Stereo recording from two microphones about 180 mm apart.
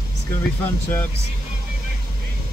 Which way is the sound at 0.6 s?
10° left (ahead or behind).